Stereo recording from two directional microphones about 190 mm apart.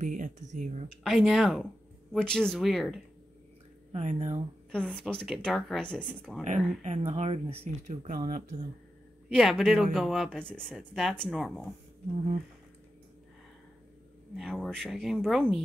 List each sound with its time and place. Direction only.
0.0 s speech: 40° right (ahead or behind)
1.0 s speech: centre (ahead or behind)
3.9 s speech: 35° right (ahead or behind)
4.6 s speech: 5° left (ahead or behind)
6.4 s speech: 40° right (ahead or behind)
9.3 s speech: centre (ahead or behind)
14.3 s speech: centre (ahead or behind)